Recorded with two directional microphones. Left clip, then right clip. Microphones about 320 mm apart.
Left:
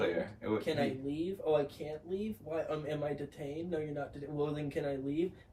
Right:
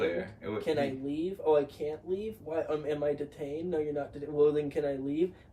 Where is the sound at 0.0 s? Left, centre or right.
Centre.